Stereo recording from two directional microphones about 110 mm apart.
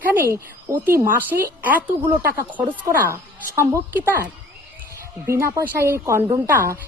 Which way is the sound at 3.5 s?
20° right (ahead or behind).